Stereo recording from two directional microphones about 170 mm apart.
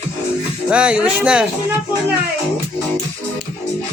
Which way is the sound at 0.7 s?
5° right (ahead or behind).